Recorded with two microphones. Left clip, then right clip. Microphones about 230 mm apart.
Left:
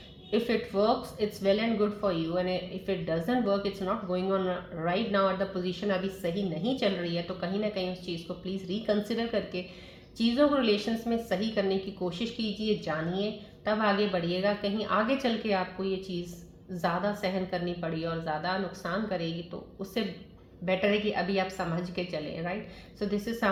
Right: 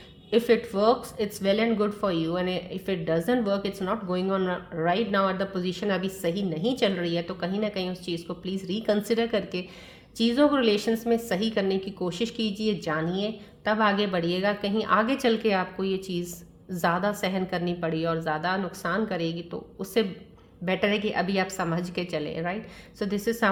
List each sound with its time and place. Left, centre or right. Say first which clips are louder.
0.3 s speech: right 7 dB; right